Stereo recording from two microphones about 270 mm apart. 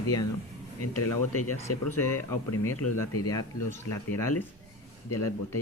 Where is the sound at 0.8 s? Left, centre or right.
Left.